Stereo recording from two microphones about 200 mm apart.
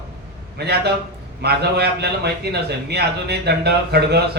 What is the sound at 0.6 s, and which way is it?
A man's voice, 55° right (ahead or behind).